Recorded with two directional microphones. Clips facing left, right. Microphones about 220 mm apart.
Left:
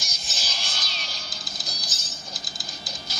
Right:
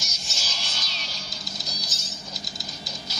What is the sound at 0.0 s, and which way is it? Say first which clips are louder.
Music: even; 55° left (ahead or behind).